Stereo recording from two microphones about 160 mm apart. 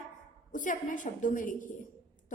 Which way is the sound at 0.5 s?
55° left (ahead or behind).